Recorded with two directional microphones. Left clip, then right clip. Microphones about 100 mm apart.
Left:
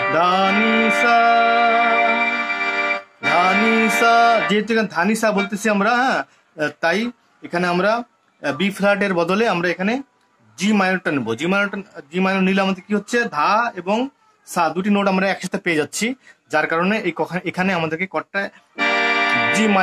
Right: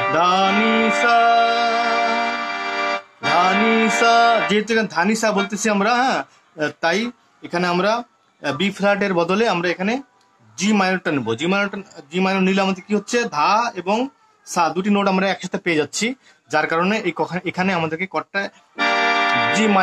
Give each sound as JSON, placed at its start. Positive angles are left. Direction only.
{"t": 0.0, "sound": "music", "side_deg": 20}
{"t": 10.5, "sound": "a man's voice", "side_deg": 20}